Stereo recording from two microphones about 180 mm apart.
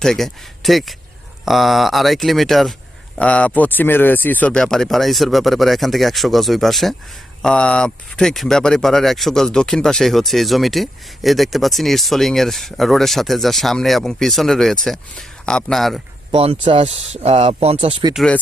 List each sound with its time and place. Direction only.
0.0 s speech: centre (ahead or behind)
16.3 s speech: 30° right (ahead or behind)
18.1 s speech: centre (ahead or behind)